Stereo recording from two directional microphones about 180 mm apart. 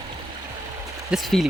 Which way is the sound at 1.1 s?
Centre (ahead or behind).